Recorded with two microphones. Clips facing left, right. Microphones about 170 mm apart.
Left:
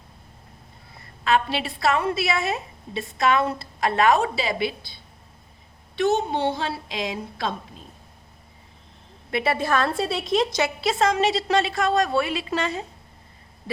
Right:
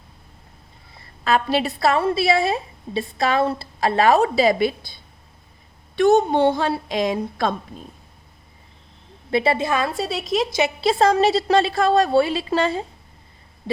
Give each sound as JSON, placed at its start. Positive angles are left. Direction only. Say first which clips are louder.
{"t": 1.2, "sound": "a woman's voice", "louder": "right 3 dB", "side_deg": -40}
{"t": 6.0, "sound": "a woman's voice", "louder": "right 6 dB", "side_deg": -50}
{"t": 9.3, "sound": "a woman's voice", "louder": "right 4 dB", "side_deg": -25}
{"t": 9.6, "sound": "a woman's voice", "louder": "even", "side_deg": -10}
{"t": 10.6, "sound": "a woman's voice", "louder": "right 4 dB", "side_deg": -30}